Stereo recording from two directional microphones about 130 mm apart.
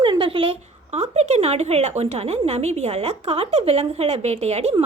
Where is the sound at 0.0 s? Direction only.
40° right (ahead or behind).